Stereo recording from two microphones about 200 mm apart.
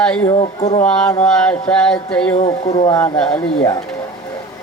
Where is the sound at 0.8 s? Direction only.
5° left (ahead or behind).